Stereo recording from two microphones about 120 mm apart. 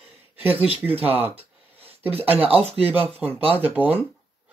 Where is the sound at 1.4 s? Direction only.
55° right (ahead or behind).